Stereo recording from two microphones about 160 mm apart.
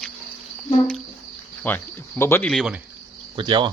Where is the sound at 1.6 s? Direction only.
10° left (ahead or behind).